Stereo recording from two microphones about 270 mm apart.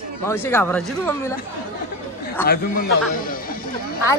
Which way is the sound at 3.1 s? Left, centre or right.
Left.